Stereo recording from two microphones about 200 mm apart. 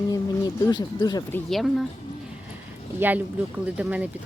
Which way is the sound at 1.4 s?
Centre (ahead or behind).